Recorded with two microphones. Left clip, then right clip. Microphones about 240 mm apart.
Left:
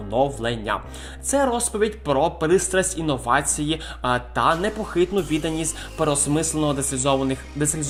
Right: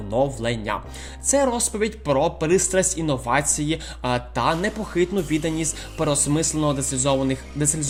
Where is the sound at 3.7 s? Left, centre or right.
Right.